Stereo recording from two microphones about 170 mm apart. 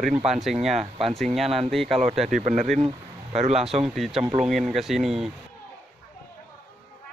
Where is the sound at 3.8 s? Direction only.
Centre (ahead or behind).